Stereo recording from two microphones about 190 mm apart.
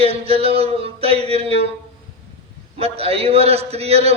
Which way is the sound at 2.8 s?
30° right (ahead or behind).